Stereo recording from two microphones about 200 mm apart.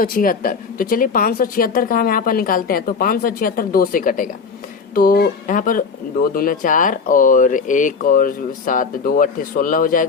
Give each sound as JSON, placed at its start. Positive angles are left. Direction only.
{"t": 0.0, "sound": "speech", "side_deg": 45}